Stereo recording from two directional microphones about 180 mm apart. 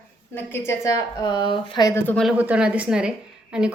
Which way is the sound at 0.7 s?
20° left (ahead or behind).